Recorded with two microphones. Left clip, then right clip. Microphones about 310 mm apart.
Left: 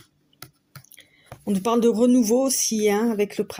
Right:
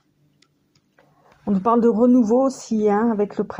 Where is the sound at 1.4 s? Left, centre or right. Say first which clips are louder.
Right 3 dB; left.